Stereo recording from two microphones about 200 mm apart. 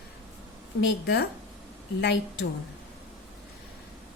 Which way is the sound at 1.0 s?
60° left (ahead or behind).